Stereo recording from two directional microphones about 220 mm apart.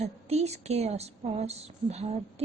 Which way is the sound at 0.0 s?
30° right (ahead or behind).